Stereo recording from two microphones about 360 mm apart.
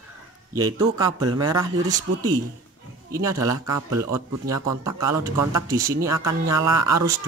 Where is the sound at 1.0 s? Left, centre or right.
Centre.